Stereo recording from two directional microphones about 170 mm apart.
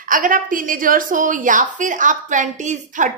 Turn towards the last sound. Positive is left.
turn(degrees=-45)  # may be behind; listen again after turning